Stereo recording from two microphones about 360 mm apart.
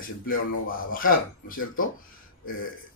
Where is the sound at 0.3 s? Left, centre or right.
Left.